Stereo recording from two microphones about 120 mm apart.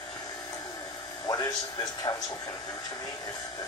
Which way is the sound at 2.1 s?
25° left (ahead or behind).